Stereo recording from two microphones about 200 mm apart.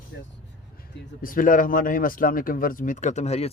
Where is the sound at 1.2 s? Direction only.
45° left (ahead or behind).